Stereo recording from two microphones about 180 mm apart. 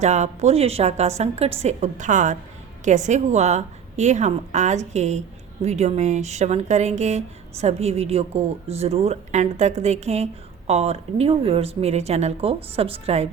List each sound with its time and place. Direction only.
0.0 s speech: 40° right (ahead or behind)